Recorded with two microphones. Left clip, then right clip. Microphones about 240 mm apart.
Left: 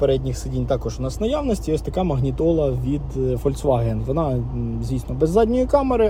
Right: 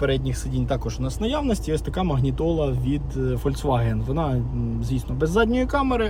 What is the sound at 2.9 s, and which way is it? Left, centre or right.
Speech, left.